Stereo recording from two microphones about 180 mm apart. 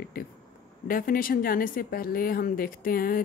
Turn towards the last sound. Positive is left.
turn(degrees=55)  # may be behind; listen again after turning